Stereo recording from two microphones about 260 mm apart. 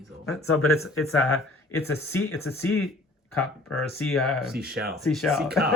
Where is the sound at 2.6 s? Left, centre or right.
Left.